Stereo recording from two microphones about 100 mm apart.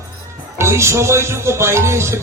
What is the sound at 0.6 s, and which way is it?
Music, 30° right (ahead or behind).